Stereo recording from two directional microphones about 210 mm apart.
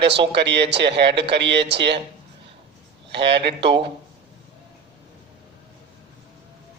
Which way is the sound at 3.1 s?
55° right (ahead or behind).